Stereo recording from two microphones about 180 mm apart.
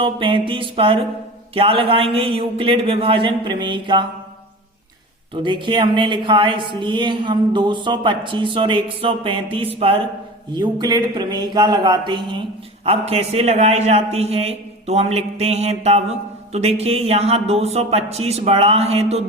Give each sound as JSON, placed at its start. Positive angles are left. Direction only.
{"t": 0.0, "sound": "a woman's voice", "side_deg": -30}
{"t": 5.3, "sound": "a woman's voice", "side_deg": -25}